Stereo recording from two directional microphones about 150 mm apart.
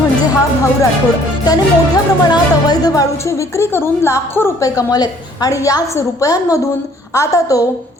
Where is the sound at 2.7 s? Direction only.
25° left (ahead or behind).